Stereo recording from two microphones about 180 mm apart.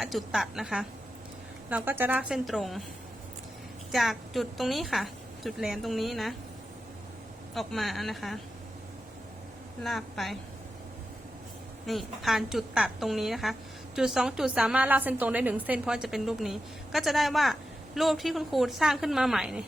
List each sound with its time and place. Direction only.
0.0 s a woman's voice: centre (ahead or behind)
3.9 s a woman's voice: centre (ahead or behind)
7.5 s a woman's voice: centre (ahead or behind)
9.8 s a woman's voice: centre (ahead or behind)
11.9 s a woman's voice: centre (ahead or behind)